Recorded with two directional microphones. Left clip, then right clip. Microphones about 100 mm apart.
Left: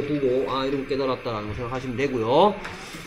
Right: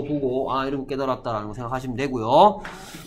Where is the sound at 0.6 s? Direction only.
15° right (ahead or behind).